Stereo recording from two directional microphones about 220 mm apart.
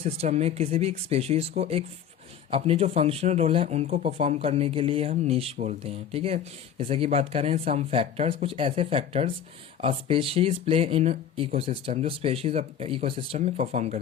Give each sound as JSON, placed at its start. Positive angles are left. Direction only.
{"t": 0.0, "sound": "speech", "side_deg": -30}